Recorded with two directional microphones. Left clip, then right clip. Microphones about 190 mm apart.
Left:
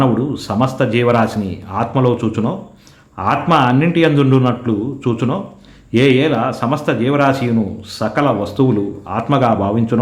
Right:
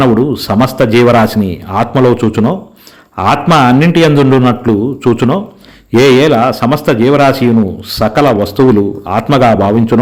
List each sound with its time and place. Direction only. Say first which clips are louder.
0.0 s a man's voice: right 7 dB; 35° right (ahead or behind)